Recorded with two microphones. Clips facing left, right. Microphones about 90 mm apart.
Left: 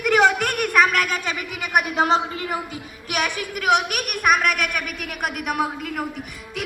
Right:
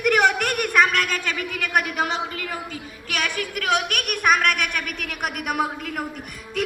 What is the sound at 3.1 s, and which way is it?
A woman's voice, 20° left (ahead or behind).